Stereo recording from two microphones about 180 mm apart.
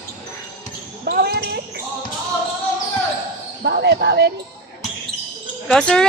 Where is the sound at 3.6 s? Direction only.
65° right (ahead or behind).